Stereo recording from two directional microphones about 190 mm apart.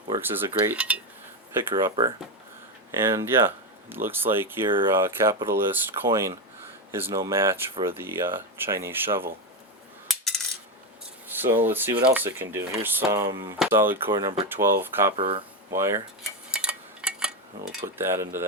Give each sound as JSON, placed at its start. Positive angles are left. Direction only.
{"t": 0.2, "sound": "speech", "side_deg": -10}
{"t": 2.9, "sound": "speech", "side_deg": -15}
{"t": 10.1, "sound": "a sound", "side_deg": 0}
{"t": 11.3, "sound": "speech", "side_deg": -10}
{"t": 13.2, "sound": "speech", "side_deg": -25}
{"t": 13.6, "sound": "speech", "side_deg": -10}
{"t": 15.1, "sound": "speech", "side_deg": -30}
{"t": 15.7, "sound": "speech", "side_deg": -15}
{"t": 16.5, "sound": "a sound", "side_deg": -5}
{"t": 17.9, "sound": "speech", "side_deg": -10}